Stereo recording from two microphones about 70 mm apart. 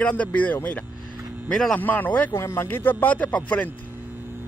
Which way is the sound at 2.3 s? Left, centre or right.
Left.